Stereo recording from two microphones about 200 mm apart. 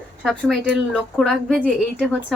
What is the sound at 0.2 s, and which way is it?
A woman's voice, centre (ahead or behind).